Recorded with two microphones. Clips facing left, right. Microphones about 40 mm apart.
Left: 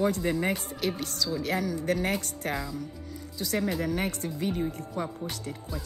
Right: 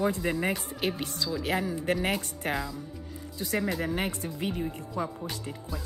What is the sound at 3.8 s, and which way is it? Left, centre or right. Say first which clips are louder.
Speech: left 1 dB; right.